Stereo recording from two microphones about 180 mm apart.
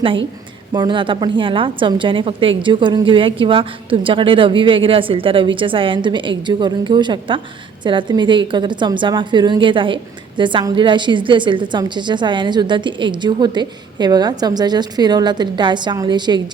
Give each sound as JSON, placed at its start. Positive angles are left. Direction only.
{"t": 0.7, "sound": "a woman's voice", "side_deg": -25}